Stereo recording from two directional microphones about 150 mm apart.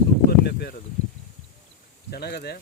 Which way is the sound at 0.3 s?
90° left.